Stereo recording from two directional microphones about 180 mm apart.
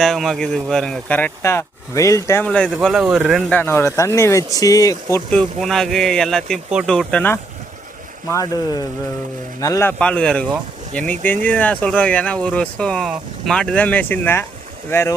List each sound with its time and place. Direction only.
0.0 s speech: centre (ahead or behind)
3.6 s speech: 15° left (ahead or behind)
8.3 s speech: 20° left (ahead or behind)
10.0 s speech: 5° left (ahead or behind)